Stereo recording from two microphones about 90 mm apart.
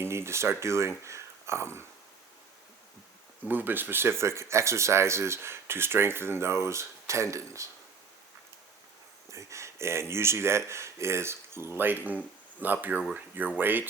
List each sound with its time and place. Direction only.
0.0 s speech: 30° right (ahead or behind)
3.4 s speech: 20° right (ahead or behind)
9.3 s speech: 35° right (ahead or behind)